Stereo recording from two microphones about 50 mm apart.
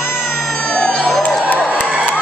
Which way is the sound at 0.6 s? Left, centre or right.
Centre.